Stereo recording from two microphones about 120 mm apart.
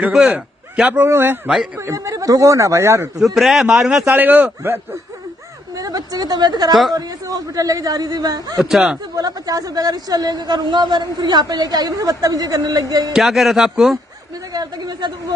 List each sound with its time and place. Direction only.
0.0 s speech: 10° right (ahead or behind); by 3.1 s 25° right (ahead or behind)
3.3 s speech: centre (ahead or behind)
4.2 s a man's voice: 15° right (ahead or behind)
5.8 s speech: 30° right (ahead or behind)
8.6 s speech: 5° right (ahead or behind)
9.1 s speech: 30° right (ahead or behind)
13.1 s speech: centre (ahead or behind)
14.5 s speech: 35° right (ahead or behind)